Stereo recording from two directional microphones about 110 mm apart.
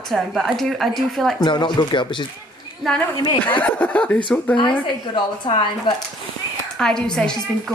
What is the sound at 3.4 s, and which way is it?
Speech, 15° left (ahead or behind).